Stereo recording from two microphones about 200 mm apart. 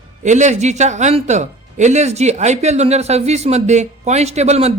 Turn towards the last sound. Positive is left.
turn(degrees=-35)  # may be behind; listen again after turning